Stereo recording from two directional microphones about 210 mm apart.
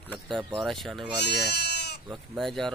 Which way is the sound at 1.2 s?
50° left (ahead or behind).